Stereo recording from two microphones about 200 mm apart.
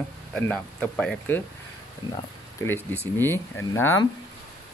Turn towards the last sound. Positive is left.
turn(degrees=10)  # may be behind; listen again after turning